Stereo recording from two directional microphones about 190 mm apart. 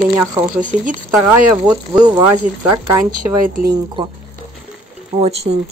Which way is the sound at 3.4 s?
45° right (ahead or behind).